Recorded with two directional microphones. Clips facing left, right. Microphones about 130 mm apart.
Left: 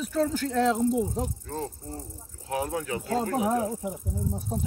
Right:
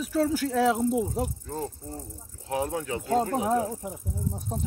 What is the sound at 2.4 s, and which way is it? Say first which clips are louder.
Speech: right 1 dB; 25° right (ahead or behind).